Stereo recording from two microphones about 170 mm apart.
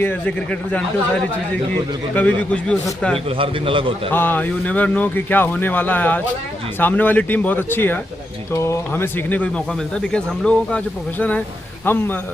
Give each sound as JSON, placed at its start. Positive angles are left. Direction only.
{"t": 0.0, "sound": "speech", "side_deg": 10}
{"t": 2.1, "sound": "speech", "side_deg": 10}
{"t": 3.2, "sound": "a man's voice", "side_deg": -30}
{"t": 4.1, "sound": "speech", "side_deg": 10}